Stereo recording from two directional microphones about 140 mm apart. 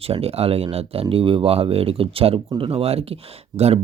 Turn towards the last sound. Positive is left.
turn(degrees=-45)  # may be behind; listen again after turning